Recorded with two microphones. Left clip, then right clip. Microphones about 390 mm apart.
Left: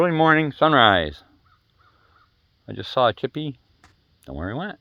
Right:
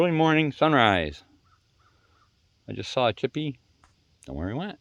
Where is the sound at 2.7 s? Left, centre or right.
Centre.